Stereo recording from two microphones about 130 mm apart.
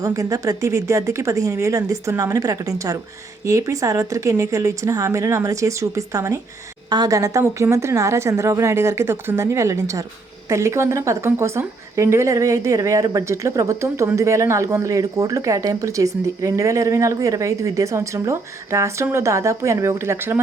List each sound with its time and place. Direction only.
0.0 s speech: 25° right (ahead or behind)